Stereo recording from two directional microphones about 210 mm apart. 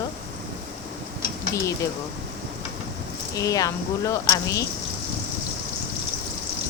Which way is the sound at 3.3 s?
15° left (ahead or behind).